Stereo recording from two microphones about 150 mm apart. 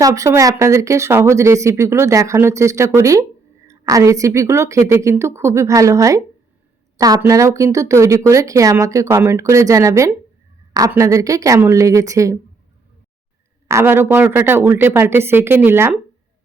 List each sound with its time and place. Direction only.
0.0 s speech: 20° right (ahead or behind)
13.7 s speech: 15° right (ahead or behind)